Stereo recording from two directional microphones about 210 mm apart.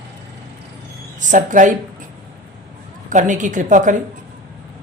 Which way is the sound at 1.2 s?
35° right (ahead or behind).